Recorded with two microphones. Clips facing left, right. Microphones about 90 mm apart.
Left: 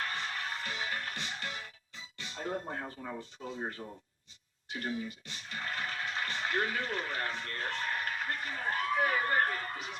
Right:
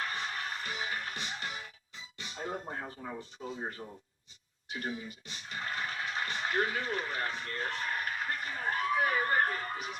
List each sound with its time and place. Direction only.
0.1 s music: 15° right (ahead or behind)
3.2 s speech: 15° right (ahead or behind)
3.8 s speech: centre (ahead or behind)
4.7 s speech: 20° right (ahead or behind)